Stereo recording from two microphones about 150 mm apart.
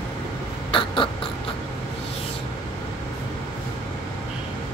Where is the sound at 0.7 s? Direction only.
35° left (ahead or behind).